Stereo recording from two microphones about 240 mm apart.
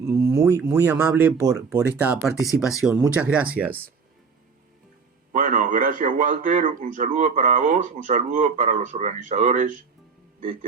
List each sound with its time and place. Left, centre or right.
0.3 s speech: centre
5.3 s speech: right